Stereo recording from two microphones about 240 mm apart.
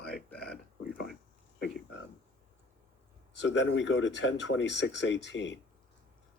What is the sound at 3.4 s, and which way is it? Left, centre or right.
Speech, left.